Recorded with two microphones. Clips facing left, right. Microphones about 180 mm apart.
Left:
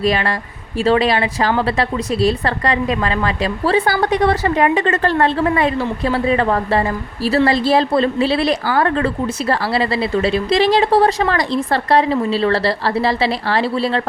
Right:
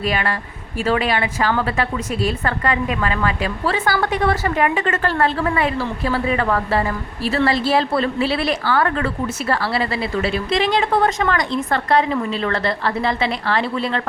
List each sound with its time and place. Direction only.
0.0 s a woman's voice: 35° left (ahead or behind)